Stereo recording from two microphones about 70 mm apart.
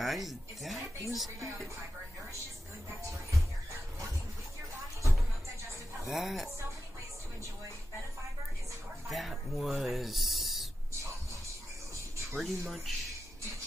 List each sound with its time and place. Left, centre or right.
0.0 s speech: centre
2.9 s music: right
6.0 s speech: centre
9.1 s a sound: centre
12.4 s speech: centre